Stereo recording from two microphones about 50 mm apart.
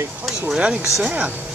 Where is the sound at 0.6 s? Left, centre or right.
Right.